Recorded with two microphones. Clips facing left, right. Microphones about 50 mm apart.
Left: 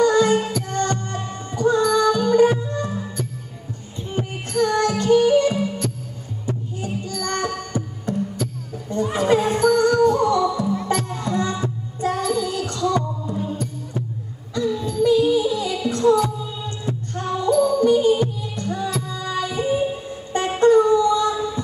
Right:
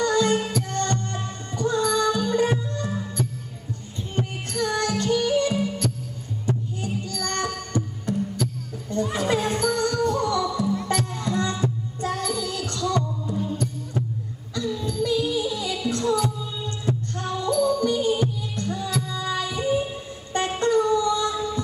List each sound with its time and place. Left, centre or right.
0.0 s music: centre